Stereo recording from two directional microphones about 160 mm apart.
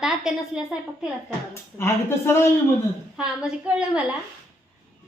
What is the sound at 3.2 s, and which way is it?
Speech, 5° right (ahead or behind).